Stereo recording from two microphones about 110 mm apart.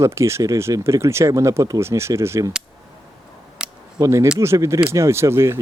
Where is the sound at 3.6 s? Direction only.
5° right (ahead or behind).